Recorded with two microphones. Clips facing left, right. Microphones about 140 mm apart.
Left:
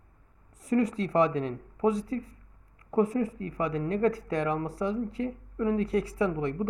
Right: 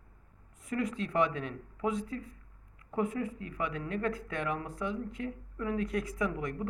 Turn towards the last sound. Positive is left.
turn(degrees=30)  # may be behind; listen again after turning